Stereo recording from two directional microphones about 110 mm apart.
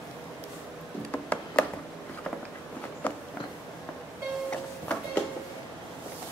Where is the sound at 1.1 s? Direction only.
10° left (ahead or behind).